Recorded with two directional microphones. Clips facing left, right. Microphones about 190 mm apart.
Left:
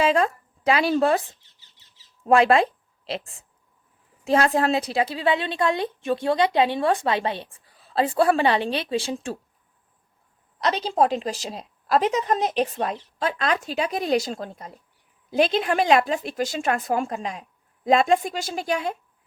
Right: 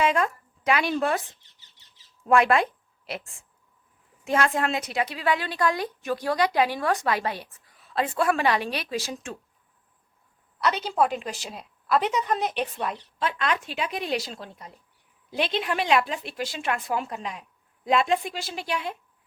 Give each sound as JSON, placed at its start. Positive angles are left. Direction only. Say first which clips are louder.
{"t": 0.0, "sound": "speech", "louder": "left 3 dB", "side_deg": 30}
{"t": 2.2, "sound": "a woman's voice", "louder": "left 3 dB", "side_deg": 30}
{"t": 4.2, "sound": "a woman's voice", "louder": "left 4 dB", "side_deg": 35}
{"t": 10.6, "sound": "a woman's voice", "louder": "left 2 dB", "side_deg": 35}